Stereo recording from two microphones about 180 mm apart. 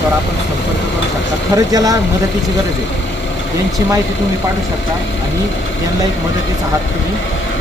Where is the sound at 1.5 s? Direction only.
20° right (ahead or behind).